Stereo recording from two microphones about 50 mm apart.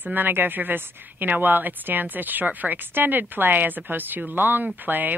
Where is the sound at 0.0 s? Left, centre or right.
Right.